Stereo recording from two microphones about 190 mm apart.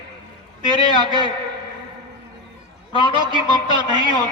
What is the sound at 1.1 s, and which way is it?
Speech, 25° right (ahead or behind).